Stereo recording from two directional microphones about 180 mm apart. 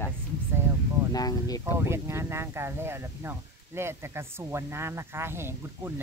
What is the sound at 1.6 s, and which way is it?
Speech, 15° right (ahead or behind).